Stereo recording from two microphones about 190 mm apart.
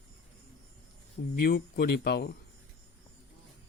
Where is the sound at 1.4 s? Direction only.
55° left (ahead or behind).